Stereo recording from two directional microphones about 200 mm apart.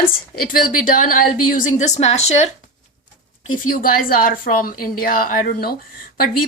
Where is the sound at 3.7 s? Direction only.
45° left (ahead or behind).